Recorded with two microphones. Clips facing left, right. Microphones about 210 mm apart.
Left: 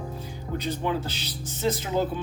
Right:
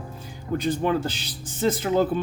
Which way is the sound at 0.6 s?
50° right (ahead or behind).